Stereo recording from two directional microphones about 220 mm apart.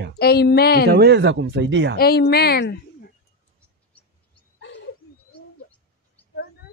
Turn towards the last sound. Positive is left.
turn(degrees=55)  # may be behind; listen again after turning